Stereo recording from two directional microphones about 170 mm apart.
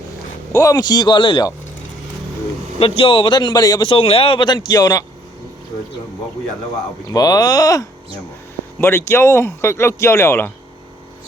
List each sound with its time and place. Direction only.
0.5 s a man's voice: 20° left (ahead or behind)
2.7 s a man's voice: 35° left (ahead or behind)
7.1 s a man's voice: 20° left (ahead or behind)